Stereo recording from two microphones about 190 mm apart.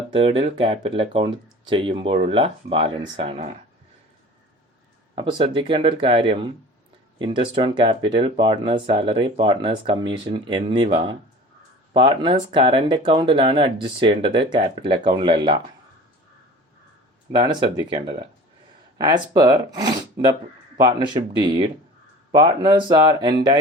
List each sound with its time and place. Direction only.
0.1 s speech: 30° right (ahead or behind)
5.1 s speech: 25° right (ahead or behind)
17.3 s speech: 25° right (ahead or behind)